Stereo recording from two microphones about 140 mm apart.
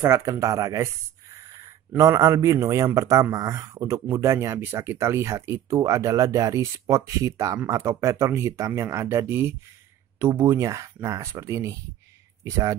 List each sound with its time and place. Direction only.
0.0 s a man's voice: 20° right (ahead or behind)